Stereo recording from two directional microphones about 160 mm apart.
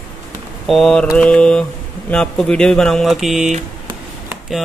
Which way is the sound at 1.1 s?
5° left (ahead or behind).